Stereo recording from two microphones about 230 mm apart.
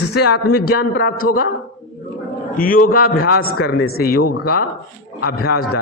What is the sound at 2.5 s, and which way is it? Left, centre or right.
A man's voice, left.